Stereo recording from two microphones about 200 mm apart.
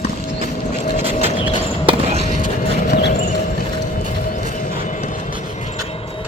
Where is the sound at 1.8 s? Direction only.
30° right (ahead or behind).